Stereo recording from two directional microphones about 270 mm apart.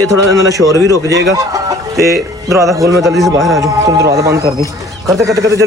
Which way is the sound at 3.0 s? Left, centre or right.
Centre.